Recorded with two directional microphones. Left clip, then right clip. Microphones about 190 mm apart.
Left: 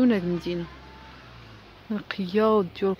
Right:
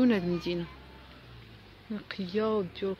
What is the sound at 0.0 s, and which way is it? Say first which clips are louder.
Speech: left 4 dB; 10° left (ahead or behind).